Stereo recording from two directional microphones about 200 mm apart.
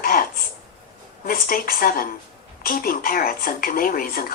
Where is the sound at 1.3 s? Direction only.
45° left (ahead or behind).